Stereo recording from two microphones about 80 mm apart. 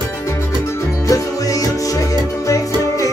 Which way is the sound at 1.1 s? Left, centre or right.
Left.